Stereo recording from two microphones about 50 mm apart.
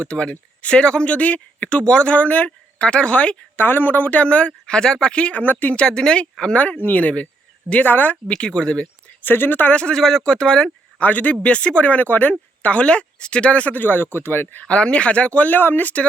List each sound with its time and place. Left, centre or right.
0.0 s speech: left
1.8 s speech: centre
3.6 s speech: left
5.7 s speech: centre
6.7 s speech: left
8.3 s speech: centre
9.2 s speech: left
9.6 s speech: left
9.9 s speech: centre
11.0 s speech: left
14.7 s speech: left
15.5 s speech: left